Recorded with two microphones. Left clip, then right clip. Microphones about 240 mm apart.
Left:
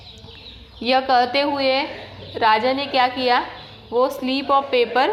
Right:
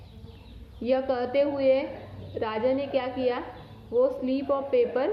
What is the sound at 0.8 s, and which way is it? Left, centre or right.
A woman's voice, centre.